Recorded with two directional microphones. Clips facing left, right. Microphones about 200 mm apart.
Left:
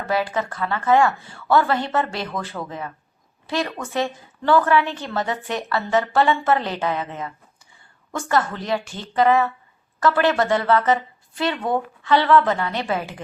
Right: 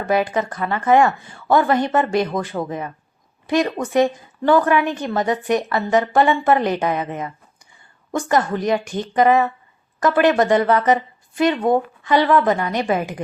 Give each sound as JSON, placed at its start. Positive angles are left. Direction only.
{"t": 0.1, "sound": "a woman's voice", "side_deg": -15}